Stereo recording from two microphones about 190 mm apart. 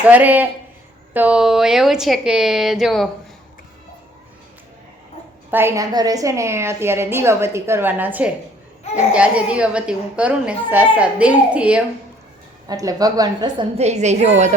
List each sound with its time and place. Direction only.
0.0 s a woman's voice: 10° right (ahead or behind)
5.5 s a woman's voice: 10° right (ahead or behind)
12.6 s a woman's voice: 20° right (ahead or behind); by 14.5 s 35° right (ahead or behind)